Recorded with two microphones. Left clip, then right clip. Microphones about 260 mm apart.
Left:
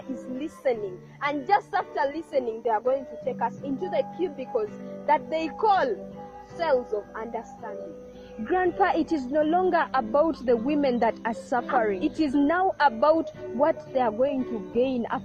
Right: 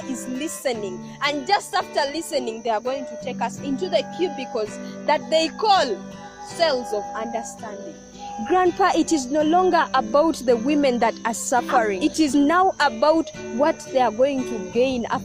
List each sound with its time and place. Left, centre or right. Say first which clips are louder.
0.3 s a woman's voice: right 1 dB; right
8.4 s a woman's voice: right 5 dB; right